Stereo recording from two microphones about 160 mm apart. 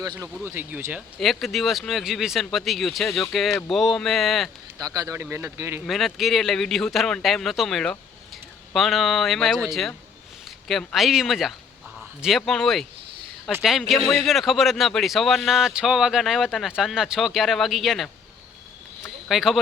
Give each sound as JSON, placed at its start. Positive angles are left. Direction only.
{"t": 0.2, "sound": "speech", "side_deg": -15}
{"t": 1.2, "sound": "a man's voice", "side_deg": 0}
{"t": 4.8, "sound": "speech", "side_deg": -20}
{"t": 5.8, "sound": "a man's voice", "side_deg": 0}
{"t": 19.0, "sound": "a sound", "side_deg": 0}